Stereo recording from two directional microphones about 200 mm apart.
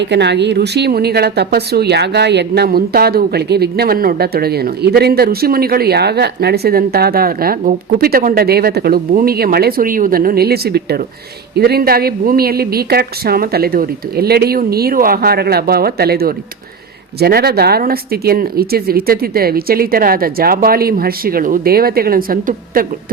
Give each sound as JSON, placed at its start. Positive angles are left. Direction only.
{"t": 0.0, "sound": "speech", "side_deg": -60}